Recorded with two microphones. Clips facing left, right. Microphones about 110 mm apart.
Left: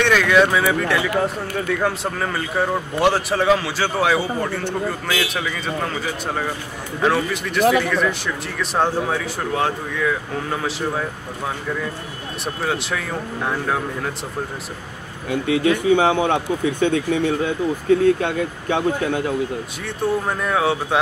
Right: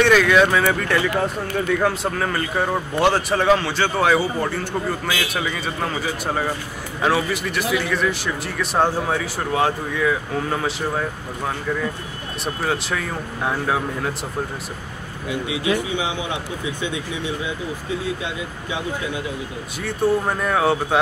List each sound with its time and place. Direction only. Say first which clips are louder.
0.0 s a sound: right 1 dB; centre (ahead or behind)
0.5 s speech: even; 5° left (ahead or behind)
7.0 s speech: left 1 dB; 5° right (ahead or behind)
13.5 s speech: right 1 dB; 5° right (ahead or behind)
15.2 s speech: left 5 dB; 50° left (ahead or behind)
19.8 s speech: right 3 dB; centre (ahead or behind)